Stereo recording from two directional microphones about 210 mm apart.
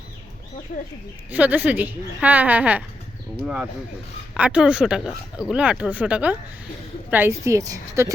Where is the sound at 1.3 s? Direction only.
5° right (ahead or behind).